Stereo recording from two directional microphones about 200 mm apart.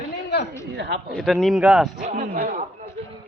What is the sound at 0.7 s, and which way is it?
Speech, 60° right (ahead or behind).